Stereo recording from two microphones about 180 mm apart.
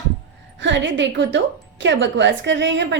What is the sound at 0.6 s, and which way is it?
A woman's voice, 80° right.